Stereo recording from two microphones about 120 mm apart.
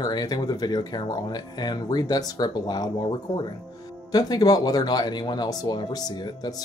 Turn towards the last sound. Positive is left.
turn(degrees=35)  # may be behind; listen again after turning